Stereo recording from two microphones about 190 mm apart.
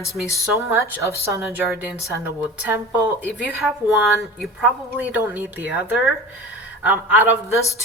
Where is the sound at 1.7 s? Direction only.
Centre (ahead or behind).